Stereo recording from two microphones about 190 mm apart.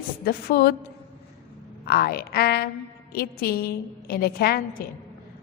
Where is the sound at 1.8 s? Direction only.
55° left (ahead or behind).